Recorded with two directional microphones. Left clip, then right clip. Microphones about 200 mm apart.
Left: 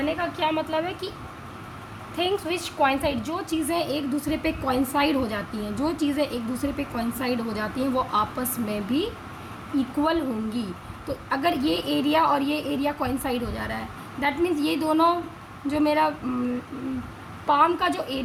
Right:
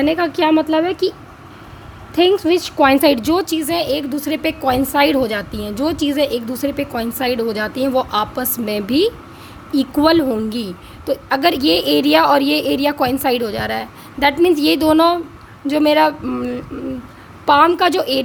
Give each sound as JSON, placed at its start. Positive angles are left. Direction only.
{"t": 0.0, "sound": "a woman's voice", "side_deg": -50}
{"t": 2.1, "sound": "a woman's voice", "side_deg": -40}
{"t": 17.4, "sound": "a woman's voice", "side_deg": -55}